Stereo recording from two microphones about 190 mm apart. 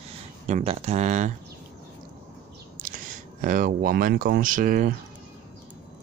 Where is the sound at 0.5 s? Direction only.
35° right (ahead or behind).